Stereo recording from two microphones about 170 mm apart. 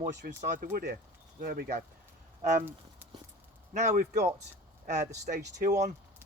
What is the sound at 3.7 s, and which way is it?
Speech, 45° right (ahead or behind).